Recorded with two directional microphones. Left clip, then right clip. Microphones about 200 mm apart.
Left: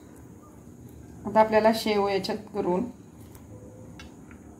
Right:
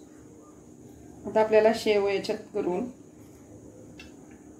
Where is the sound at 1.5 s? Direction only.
40° left (ahead or behind).